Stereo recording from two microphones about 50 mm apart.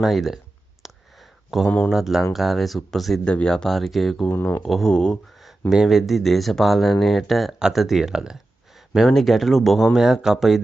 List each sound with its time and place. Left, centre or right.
0.0 s speech: centre
1.5 s speech: centre
3.3 s speech: centre
3.7 s speech: centre
4.3 s speech: left
4.8 s speech: centre
5.7 s speech: centre
9.9 s speech: centre